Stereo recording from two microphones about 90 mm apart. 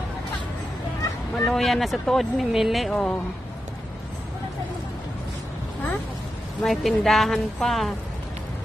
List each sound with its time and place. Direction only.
1.3 s speech: 5° left (ahead or behind)
6.6 s speech: centre (ahead or behind)